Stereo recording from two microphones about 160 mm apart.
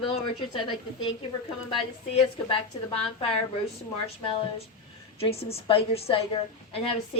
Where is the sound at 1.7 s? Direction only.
35° left (ahead or behind).